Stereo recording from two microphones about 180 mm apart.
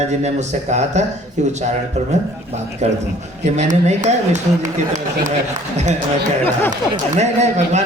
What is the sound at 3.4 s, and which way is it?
Speech, 40° right (ahead or behind).